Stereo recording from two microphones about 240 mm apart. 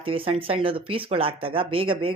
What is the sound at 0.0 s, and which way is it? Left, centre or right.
Speech, right.